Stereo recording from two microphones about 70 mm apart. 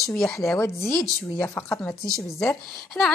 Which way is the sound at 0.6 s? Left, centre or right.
Left.